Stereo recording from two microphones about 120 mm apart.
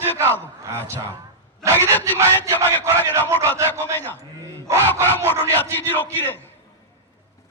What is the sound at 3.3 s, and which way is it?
Speech, 15° left (ahead or behind).